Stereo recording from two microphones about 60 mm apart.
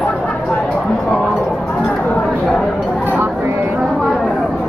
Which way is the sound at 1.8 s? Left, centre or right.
Left.